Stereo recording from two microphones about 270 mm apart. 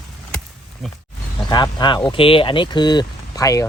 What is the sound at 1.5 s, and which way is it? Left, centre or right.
Speech, centre.